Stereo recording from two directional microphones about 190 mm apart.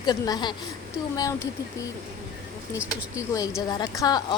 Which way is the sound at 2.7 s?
15° left (ahead or behind).